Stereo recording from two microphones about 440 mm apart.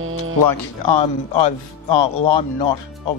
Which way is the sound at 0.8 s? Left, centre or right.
Left.